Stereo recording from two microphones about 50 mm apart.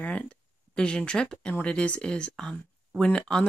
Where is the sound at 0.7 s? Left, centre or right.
Centre.